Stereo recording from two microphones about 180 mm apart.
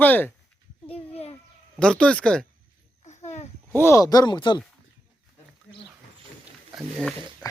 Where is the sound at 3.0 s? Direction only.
40° left (ahead or behind).